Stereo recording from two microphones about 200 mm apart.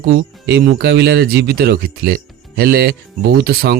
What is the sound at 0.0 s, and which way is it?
Speech, 55° right (ahead or behind).